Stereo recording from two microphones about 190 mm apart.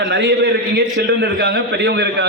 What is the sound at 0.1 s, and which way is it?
A man's voice, 65° right (ahead or behind).